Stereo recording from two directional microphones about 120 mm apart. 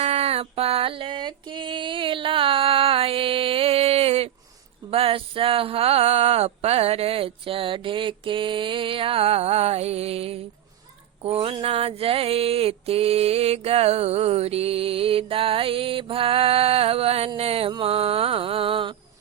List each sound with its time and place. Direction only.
0.0 s music: 60° right (ahead or behind)
4.9 s mantra: 50° right (ahead or behind)